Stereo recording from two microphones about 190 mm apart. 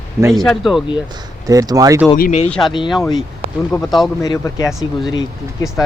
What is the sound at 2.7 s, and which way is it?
Speech, 25° left (ahead or behind).